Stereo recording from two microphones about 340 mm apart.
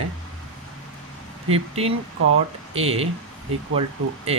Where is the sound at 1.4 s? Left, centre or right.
Centre.